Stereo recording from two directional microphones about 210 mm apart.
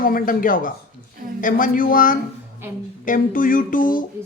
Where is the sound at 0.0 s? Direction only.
45° left (ahead or behind).